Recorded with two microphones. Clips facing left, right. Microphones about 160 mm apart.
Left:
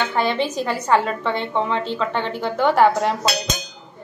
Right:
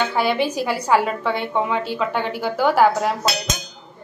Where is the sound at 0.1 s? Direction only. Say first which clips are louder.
Right 1 dB; 10° right (ahead or behind).